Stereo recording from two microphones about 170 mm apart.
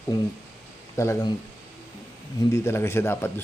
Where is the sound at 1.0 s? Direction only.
15° left (ahead or behind).